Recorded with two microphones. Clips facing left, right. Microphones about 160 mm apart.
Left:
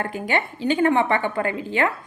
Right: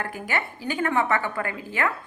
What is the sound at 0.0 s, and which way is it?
A woman's voice, 25° left (ahead or behind).